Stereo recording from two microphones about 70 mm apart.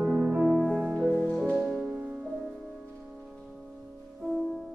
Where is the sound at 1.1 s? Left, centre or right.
Centre.